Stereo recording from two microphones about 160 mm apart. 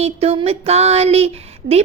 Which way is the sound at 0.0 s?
40° right (ahead or behind).